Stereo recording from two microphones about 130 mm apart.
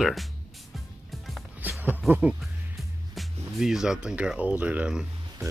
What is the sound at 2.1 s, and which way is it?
Speech, 10° right (ahead or behind).